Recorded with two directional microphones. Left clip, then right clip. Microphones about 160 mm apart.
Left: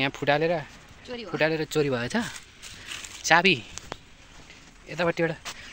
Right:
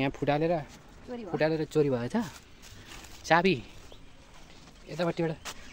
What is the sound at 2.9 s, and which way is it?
Zipper, 50° right (ahead or behind).